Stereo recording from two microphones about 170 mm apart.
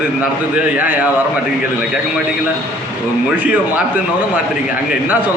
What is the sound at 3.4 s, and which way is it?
Speech, 10° right (ahead or behind).